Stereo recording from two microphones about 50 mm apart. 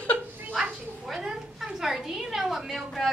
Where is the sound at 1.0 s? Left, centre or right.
Centre.